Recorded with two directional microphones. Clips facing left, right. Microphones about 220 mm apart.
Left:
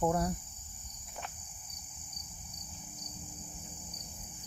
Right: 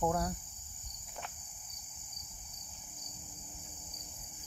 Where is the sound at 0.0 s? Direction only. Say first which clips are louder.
Left 2 dB; 10° left (ahead or behind).